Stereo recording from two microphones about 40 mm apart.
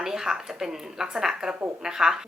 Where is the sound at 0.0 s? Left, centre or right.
Centre.